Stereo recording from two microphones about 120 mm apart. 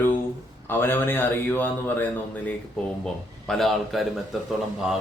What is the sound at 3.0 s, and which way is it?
Speech, 5° left (ahead or behind).